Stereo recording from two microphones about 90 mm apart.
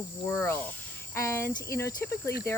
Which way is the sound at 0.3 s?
25° left (ahead or behind).